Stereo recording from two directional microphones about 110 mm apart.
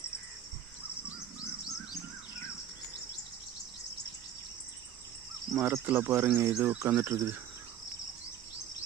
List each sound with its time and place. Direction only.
5.6 s speech: 25° right (ahead or behind)